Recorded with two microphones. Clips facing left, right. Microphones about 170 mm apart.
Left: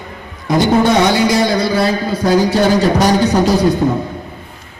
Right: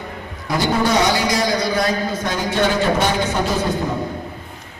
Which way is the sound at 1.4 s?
30° left (ahead or behind).